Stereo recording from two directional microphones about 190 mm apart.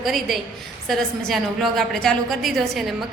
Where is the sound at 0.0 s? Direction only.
Centre (ahead or behind).